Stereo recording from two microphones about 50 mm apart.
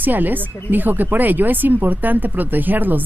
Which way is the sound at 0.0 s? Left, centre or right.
Right.